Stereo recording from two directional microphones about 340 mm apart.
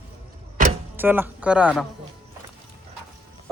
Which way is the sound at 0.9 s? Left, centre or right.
Centre.